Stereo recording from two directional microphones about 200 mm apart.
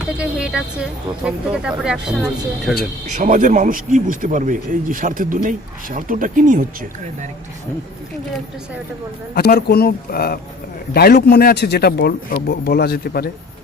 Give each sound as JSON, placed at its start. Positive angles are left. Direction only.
{"t": 0.0, "sound": "speech", "side_deg": -5}
{"t": 3.2, "sound": "speech", "side_deg": -40}
{"t": 9.3, "sound": "speech", "side_deg": 50}